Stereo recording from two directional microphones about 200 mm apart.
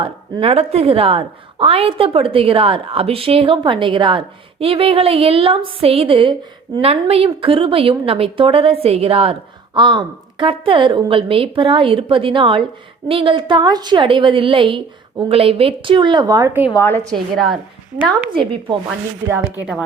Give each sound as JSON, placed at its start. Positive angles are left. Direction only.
{"t": 0.0, "sound": "a woman's voice", "side_deg": -25}
{"t": 16.7, "sound": "a woman's voice", "side_deg": 10}
{"t": 17.1, "sound": "a woman's voice", "side_deg": 0}
{"t": 18.3, "sound": "a woman's voice", "side_deg": -25}